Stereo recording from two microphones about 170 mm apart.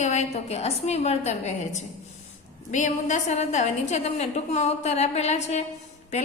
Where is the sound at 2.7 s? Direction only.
45° left (ahead or behind).